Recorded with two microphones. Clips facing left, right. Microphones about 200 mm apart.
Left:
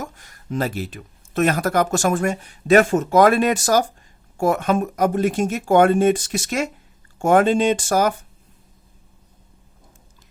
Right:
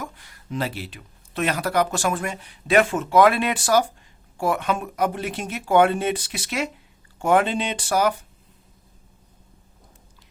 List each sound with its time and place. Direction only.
0.0 s speech: 45° left (ahead or behind)